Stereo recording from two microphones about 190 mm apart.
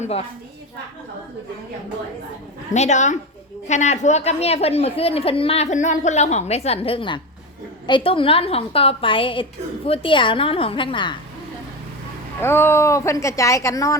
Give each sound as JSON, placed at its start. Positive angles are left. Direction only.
{"t": 2.7, "sound": "a woman's voice", "side_deg": 35}
{"t": 12.4, "sound": "speech", "side_deg": 10}